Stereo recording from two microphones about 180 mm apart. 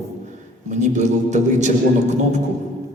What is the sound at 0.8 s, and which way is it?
Speech, 40° right (ahead or behind).